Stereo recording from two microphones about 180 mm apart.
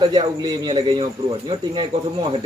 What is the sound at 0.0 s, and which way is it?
A man's voice, 25° right (ahead or behind).